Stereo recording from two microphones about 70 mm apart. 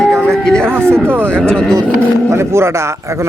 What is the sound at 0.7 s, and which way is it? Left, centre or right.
Speech, right.